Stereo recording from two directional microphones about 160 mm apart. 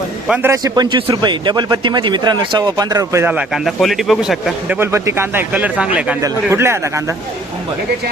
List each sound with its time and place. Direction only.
0.4 s speech: 20° right (ahead or behind)
3.3 s a man's voice: centre (ahead or behind)
4.8 s speech: 15° right (ahead or behind)